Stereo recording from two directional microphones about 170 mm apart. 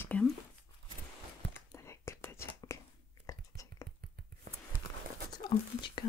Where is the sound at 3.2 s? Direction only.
20° left (ahead or behind).